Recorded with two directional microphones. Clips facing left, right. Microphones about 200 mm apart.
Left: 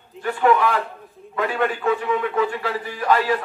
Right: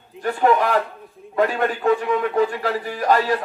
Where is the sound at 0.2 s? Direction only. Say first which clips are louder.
Even; 40° right (ahead or behind).